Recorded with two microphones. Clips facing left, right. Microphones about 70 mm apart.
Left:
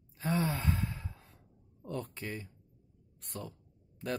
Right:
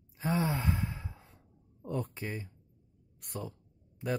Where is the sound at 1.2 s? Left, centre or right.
Centre.